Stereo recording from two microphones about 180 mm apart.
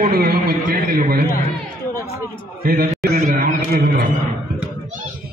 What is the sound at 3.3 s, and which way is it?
Speech, 55° right (ahead or behind).